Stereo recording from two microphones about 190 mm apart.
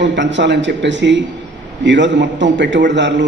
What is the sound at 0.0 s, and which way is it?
A man's voice, 70° right (ahead or behind).